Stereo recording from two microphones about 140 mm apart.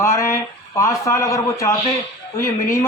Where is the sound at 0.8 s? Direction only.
20° left (ahead or behind).